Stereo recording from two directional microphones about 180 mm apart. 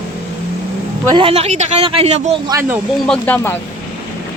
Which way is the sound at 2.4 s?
15° right (ahead or behind).